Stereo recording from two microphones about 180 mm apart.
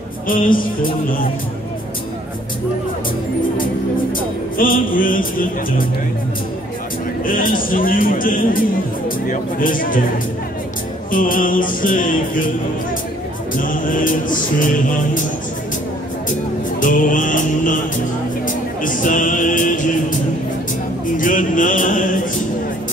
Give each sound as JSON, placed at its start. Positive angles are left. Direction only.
{"t": 0.3, "sound": "music", "side_deg": 50}
{"t": 4.6, "sound": "music", "side_deg": 50}
{"t": 7.2, "sound": "music", "side_deg": 50}
{"t": 11.1, "sound": "music", "side_deg": 50}
{"t": 13.6, "sound": "music", "side_deg": 50}
{"t": 16.8, "sound": "music", "side_deg": 45}
{"t": 18.8, "sound": "music", "side_deg": 45}
{"t": 21.2, "sound": "music", "side_deg": 45}